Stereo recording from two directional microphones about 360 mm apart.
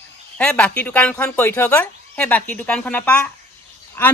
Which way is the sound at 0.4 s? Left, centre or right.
Centre.